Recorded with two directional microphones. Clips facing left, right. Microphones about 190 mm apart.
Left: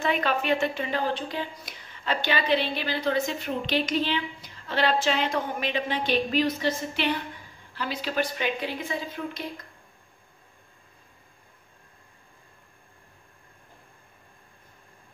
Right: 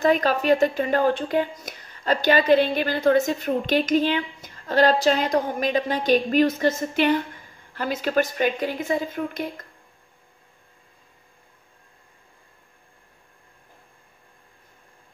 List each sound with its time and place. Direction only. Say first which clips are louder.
0.0 s a woman's voice: right 6 dB; 40° right (ahead or behind)